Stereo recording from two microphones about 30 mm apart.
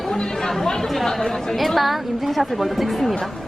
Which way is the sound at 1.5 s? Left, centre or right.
Centre.